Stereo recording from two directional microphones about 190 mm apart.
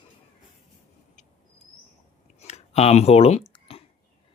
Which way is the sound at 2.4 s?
35° left (ahead or behind).